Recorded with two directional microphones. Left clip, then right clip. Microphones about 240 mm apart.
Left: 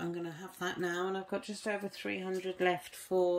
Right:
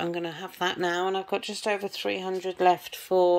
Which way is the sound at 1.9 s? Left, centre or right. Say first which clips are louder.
Right 9 dB; centre.